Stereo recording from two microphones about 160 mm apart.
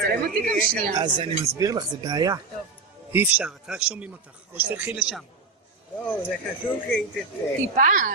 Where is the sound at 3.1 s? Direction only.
10° right (ahead or behind).